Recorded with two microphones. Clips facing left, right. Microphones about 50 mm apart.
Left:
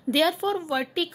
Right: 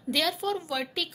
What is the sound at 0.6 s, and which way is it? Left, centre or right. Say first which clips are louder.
Speech: left 5 dB; centre.